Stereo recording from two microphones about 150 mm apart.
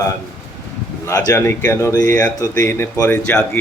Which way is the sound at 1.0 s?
20° left (ahead or behind).